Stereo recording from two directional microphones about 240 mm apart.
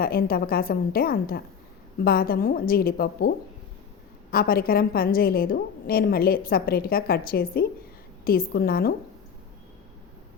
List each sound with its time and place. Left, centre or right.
0.0 s a woman's voice: left